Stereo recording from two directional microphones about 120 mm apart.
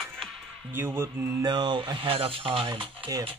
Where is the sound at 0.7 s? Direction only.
20° right (ahead or behind).